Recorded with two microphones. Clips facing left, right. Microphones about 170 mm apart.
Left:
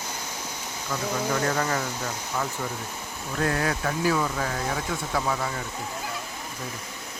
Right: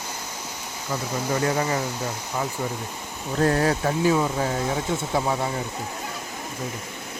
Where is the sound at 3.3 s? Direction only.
30° right (ahead or behind).